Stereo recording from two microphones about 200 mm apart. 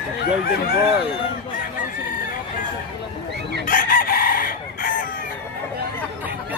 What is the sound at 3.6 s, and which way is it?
Chicken, 45° left (ahead or behind).